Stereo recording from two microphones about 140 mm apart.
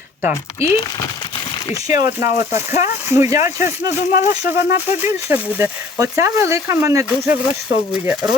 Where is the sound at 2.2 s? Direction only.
55° left (ahead or behind).